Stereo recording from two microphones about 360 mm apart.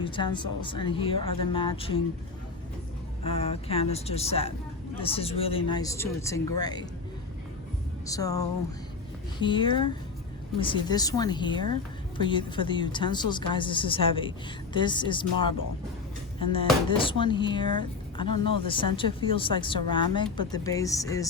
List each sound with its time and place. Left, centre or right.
0.0 s a woman's voice: centre
3.2 s a woman's voice: centre
8.0 s a woman's voice: centre
17.0 s a woman's voice: centre